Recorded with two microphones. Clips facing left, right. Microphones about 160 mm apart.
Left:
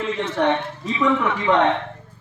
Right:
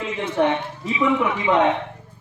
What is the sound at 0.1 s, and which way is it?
A man's voice, 20° right (ahead or behind).